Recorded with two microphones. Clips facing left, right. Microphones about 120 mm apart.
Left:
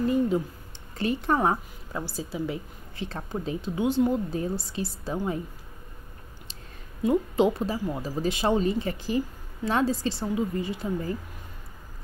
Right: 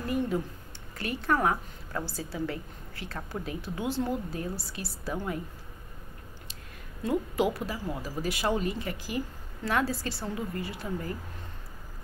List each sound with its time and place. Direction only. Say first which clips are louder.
0.9 s a woman's voice: left 3 dB; 25° left (ahead or behind)
1.9 s a woman's voice: left 2 dB; 15° left (ahead or behind)
7.0 s a woman's voice: left 5 dB; 20° left (ahead or behind)